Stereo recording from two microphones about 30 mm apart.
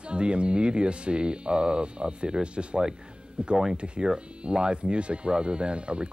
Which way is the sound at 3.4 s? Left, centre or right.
Right.